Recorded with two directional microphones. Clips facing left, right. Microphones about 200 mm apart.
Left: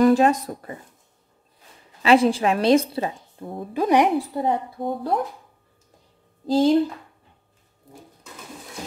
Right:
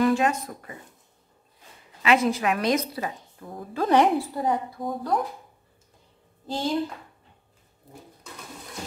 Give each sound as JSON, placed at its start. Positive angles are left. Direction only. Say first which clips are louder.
{"t": 0.0, "sound": "speech", "louder": "left 6 dB", "side_deg": 35}
{"t": 2.0, "sound": "a woman's voice", "louder": "left 5 dB", "side_deg": 30}
{"t": 3.8, "sound": "a woman's voice", "louder": "left 1 dB", "side_deg": 15}
{"t": 4.4, "sound": "a woman's voice", "louder": "left 2 dB", "side_deg": 25}
{"t": 6.4, "sound": "speech", "louder": "left 10 dB", "side_deg": 35}